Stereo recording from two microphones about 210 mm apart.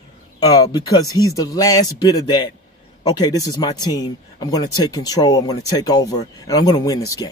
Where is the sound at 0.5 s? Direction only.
20° left (ahead or behind).